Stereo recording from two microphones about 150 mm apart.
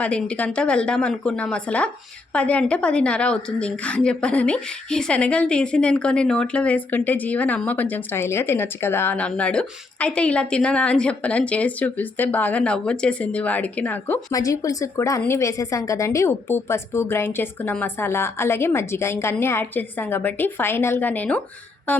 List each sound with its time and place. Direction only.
0.0 s a woman's voice: 10° left (ahead or behind)
14.3 s a woman's voice: 25° left (ahead or behind)